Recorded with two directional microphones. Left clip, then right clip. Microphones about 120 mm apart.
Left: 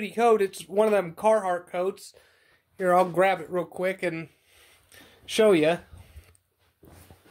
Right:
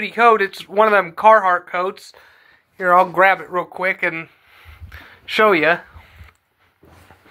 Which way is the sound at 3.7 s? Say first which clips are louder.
Right 9 dB; 70° left (ahead or behind).